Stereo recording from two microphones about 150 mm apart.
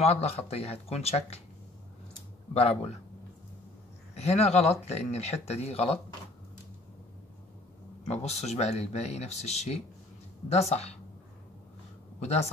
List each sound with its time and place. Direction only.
0.0 s speech: 45° left (ahead or behind)
2.5 s speech: 40° left (ahead or behind)
4.1 s speech: 45° left (ahead or behind)
8.1 s speech: 45° left (ahead or behind)
12.2 s speech: 45° left (ahead or behind)